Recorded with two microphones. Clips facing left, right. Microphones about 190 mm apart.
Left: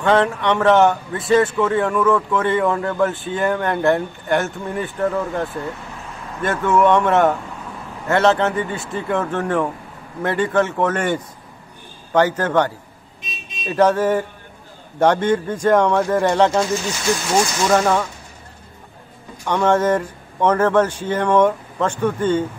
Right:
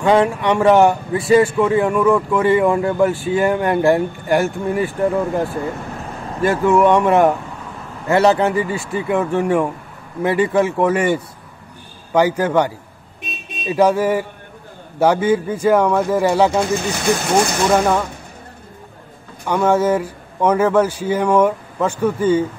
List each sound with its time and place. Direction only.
0.0 s speech: 10° right (ahead or behind)
6.4 s speech: 5° right (ahead or behind)
13.2 s vehicle: 60° right (ahead or behind)
13.7 s speech: 10° right (ahead or behind)
16.6 s speech: 55° right (ahead or behind)
17.7 s speech: 5° right (ahead or behind)
19.4 s speech: 10° right (ahead or behind)